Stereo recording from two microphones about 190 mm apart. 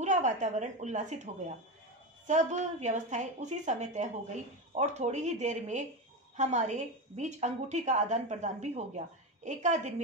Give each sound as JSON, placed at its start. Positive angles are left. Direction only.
{"t": 0.0, "sound": "a woman's voice", "side_deg": -40}